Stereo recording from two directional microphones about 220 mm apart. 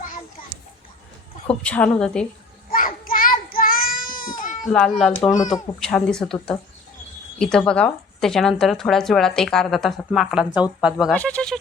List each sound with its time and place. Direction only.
1.6 s speech: 5° left (ahead or behind)
2.6 s child singing: 40° left (ahead or behind)
4.6 s speech: centre (ahead or behind)